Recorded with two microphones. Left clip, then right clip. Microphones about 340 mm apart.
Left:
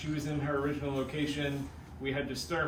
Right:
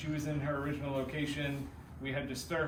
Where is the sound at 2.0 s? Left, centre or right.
Centre.